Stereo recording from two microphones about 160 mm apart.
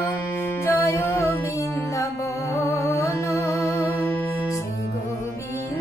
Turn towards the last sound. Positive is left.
turn(degrees=20)  # may be behind; listen again after turning